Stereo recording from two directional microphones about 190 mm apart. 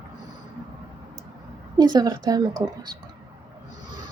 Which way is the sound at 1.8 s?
20° right (ahead or behind).